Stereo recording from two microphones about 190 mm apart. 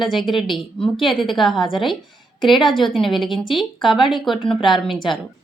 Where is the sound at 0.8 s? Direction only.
25° left (ahead or behind).